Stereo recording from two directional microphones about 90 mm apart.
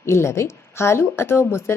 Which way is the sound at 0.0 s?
30° left (ahead or behind).